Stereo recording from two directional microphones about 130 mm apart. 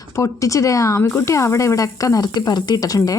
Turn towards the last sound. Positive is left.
turn(degrees=30)  # may be behind; listen again after turning